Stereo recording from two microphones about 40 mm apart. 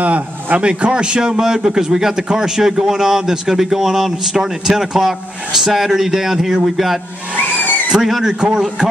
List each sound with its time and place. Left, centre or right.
0.0 s a man's voice: right
0.7 s a man's voice: right
8.4 s a man's voice: right